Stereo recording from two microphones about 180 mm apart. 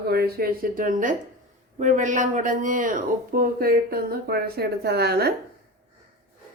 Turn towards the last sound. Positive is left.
turn(degrees=-65)  # may be behind; listen again after turning